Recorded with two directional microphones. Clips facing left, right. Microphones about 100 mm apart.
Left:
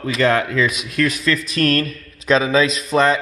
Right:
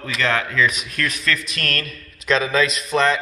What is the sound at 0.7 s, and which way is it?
Speech, 10° left (ahead or behind).